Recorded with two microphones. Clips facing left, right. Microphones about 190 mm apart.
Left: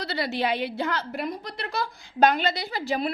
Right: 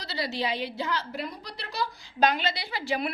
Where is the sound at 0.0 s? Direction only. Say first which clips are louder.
Left 4 dB; 55° left (ahead or behind).